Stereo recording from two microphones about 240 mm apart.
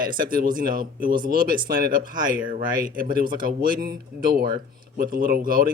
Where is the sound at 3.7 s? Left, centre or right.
Right.